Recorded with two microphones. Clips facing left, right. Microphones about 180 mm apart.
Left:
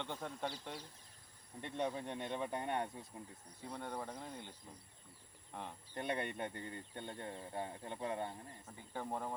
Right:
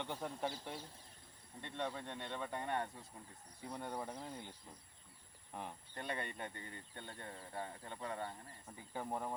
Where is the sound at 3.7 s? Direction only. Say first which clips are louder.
Even; 10° right (ahead or behind).